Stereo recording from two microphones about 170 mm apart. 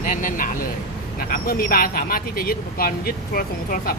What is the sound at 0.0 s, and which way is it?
Speech, 50° left (ahead or behind).